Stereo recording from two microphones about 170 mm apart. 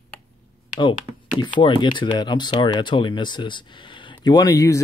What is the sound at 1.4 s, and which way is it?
Speech, 25° left (ahead or behind).